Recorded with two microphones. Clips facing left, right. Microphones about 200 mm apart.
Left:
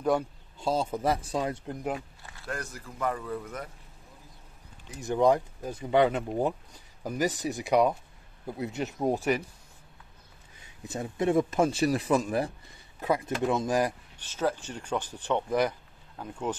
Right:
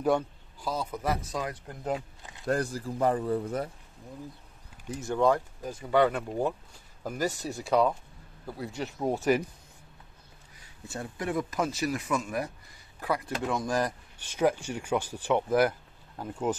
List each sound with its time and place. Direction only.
0.6 s speech: 25° left (ahead or behind)
2.0 s a sound: 20° right (ahead or behind)
2.4 s a man's voice: 35° right (ahead or behind)
5.0 s speech: 15° left (ahead or behind)
10.6 s speech: 20° left (ahead or behind)
14.3 s speech: 15° right (ahead or behind)